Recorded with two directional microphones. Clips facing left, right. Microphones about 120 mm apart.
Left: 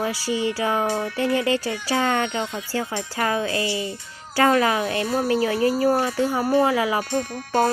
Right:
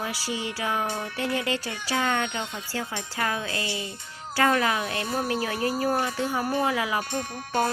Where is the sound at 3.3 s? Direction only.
30° left (ahead or behind).